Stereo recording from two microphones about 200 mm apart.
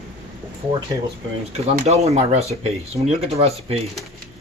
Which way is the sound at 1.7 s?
35° right (ahead or behind).